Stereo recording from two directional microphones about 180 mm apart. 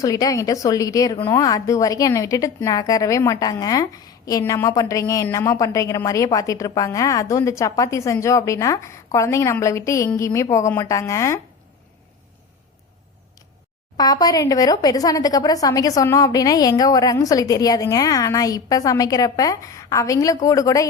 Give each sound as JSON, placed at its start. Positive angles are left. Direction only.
{"t": 0.0, "sound": "a woman's voice", "side_deg": 20}
{"t": 13.9, "sound": "a woman's voice", "side_deg": 20}